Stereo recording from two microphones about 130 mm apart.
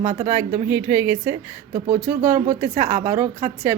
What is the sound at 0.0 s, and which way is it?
Speech, 35° right (ahead or behind).